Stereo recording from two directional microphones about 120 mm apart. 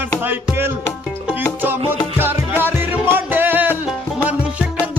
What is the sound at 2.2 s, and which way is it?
Music, 15° right (ahead or behind).